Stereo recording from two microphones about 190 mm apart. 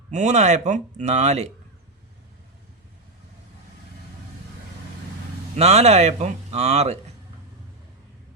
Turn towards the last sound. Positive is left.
turn(degrees=-35)  # may be behind; listen again after turning